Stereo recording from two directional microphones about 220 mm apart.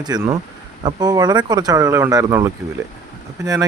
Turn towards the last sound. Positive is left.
turn(degrees=-15)  # may be behind; listen again after turning